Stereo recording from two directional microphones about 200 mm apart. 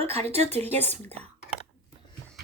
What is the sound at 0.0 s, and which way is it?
Speech, 30° right (ahead or behind).